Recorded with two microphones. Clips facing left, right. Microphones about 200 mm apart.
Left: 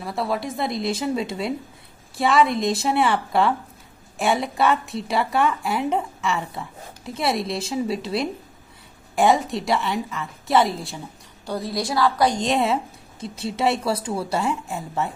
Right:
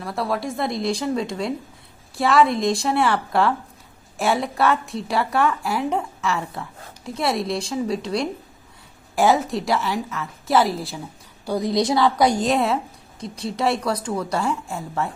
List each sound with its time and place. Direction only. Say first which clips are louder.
0.0 s a woman's voice: right 1 dB; centre (ahead or behind)
11.4 s a woman's voice: right 6 dB; 15° right (ahead or behind)
12.3 s a woman's voice: right 1 dB; centre (ahead or behind)